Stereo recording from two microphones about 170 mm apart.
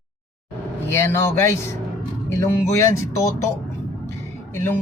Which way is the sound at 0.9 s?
15° left (ahead or behind).